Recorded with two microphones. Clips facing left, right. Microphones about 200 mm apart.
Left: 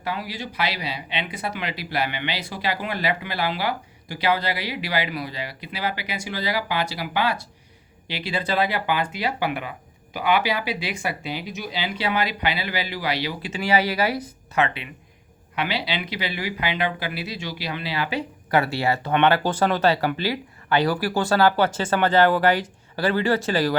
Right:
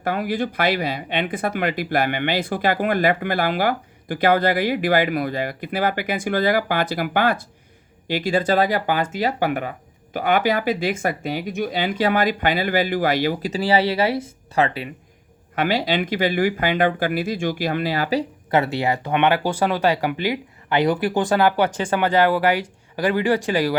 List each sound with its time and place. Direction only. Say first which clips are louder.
0.0 s speech: right 7 dB; 50° right (ahead or behind)
18.5 s speech: right 2 dB; 20° right (ahead or behind)